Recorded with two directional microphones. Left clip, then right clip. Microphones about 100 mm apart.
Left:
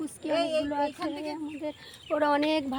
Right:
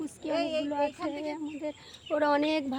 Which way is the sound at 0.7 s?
Centre (ahead or behind).